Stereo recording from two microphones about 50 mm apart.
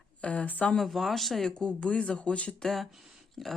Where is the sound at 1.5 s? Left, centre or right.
Left.